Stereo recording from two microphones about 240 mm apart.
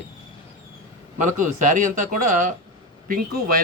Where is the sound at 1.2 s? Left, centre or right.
Right.